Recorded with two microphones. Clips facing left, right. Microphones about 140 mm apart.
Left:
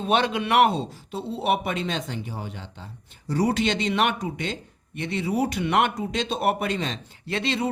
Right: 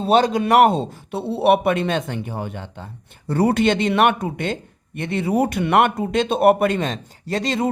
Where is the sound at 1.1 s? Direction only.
65° right (ahead or behind).